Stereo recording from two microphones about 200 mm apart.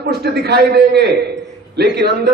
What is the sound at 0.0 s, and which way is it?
A man's voice, 55° right (ahead or behind).